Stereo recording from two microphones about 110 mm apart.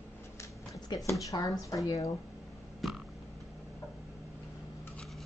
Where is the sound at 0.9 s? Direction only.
40° left (ahead or behind).